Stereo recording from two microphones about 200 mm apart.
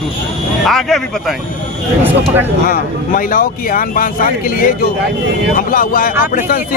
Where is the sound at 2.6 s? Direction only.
45° left (ahead or behind).